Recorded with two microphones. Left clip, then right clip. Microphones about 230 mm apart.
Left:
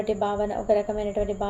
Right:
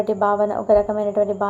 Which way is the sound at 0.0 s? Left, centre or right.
Right.